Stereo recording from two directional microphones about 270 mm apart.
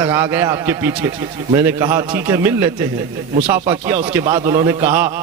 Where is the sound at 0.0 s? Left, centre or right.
Centre.